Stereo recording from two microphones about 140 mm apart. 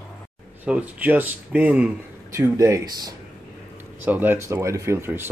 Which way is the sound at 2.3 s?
20° right (ahead or behind).